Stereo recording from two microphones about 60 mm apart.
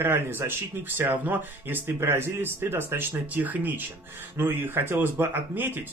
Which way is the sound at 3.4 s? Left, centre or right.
Right.